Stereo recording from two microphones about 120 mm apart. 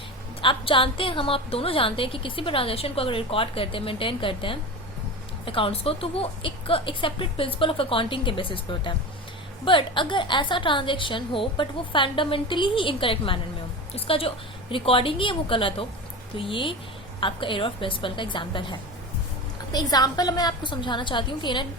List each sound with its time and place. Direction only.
0.4 s a woman's voice: 45° left (ahead or behind)